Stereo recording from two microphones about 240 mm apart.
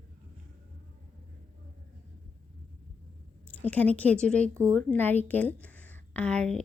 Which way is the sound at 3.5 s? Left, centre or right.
Centre.